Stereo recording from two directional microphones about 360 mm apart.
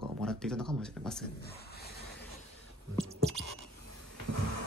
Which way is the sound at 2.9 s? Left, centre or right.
Centre.